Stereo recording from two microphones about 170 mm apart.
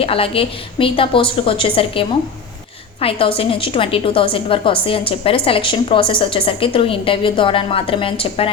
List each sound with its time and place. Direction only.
0.0 s a woman's voice: 35° left (ahead or behind)